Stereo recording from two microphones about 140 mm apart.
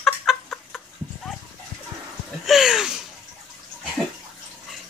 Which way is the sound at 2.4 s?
5° right (ahead or behind).